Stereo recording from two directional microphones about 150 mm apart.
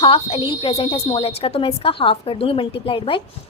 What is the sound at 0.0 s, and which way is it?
A woman's voice, 40° left (ahead or behind).